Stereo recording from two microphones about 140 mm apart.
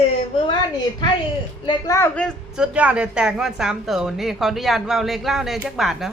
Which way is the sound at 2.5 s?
5° right (ahead or behind).